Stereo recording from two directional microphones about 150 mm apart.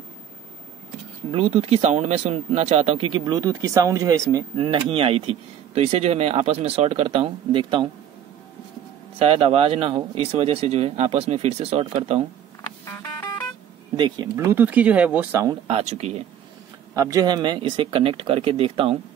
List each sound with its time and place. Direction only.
1.3 s speech: 40° right (ahead or behind)
9.2 s speech: 45° right (ahead or behind)
12.8 s music: 20° left (ahead or behind)
13.9 s speech: 30° right (ahead or behind); by 15.4 s 10° right (ahead or behind)
15.6 s speech: 45° right (ahead or behind)
16.9 s speech: 20° right (ahead or behind); by 18.9 s 40° right (ahead or behind)